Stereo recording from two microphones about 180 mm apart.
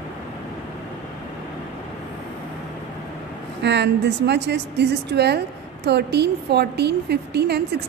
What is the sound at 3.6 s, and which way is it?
A woman's voice, 75° right (ahead or behind).